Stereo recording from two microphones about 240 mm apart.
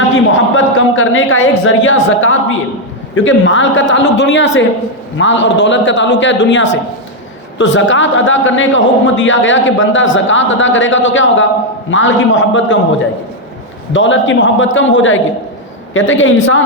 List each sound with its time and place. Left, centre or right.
0.3 s a woman's voice: left
13.9 s a man's voice: left